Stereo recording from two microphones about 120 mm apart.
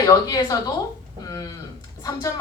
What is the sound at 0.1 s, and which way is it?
A woman's voice, 30° left (ahead or behind).